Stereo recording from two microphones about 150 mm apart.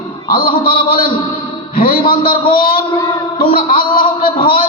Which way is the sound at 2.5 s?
70° left (ahead or behind).